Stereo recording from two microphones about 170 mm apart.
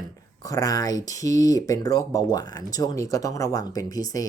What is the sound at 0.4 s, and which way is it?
Speech, 20° left (ahead or behind).